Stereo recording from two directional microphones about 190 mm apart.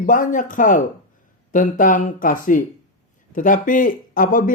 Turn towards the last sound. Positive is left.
turn(degrees=45)  # may be behind; listen again after turning